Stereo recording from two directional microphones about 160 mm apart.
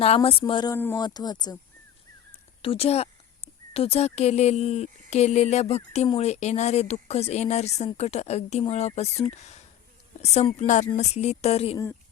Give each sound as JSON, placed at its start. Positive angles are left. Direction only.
{"t": 0.0, "sound": "speech", "side_deg": 35}
{"t": 0.7, "sound": "speech", "side_deg": 15}
{"t": 0.9, "sound": "speech", "side_deg": 25}
{"t": 2.6, "sound": "a woman's voice", "side_deg": 35}